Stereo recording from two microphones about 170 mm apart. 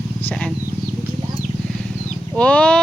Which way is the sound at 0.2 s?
10° left (ahead or behind).